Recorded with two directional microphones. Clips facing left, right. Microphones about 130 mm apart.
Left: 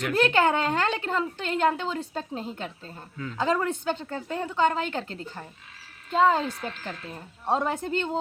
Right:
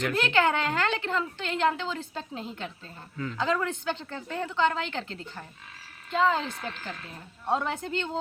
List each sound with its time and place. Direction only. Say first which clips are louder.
0.1 s a woman's voice: left 5 dB; 40° left (ahead or behind)